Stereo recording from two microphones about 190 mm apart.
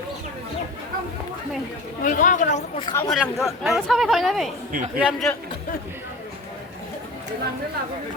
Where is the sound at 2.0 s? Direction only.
45° left (ahead or behind).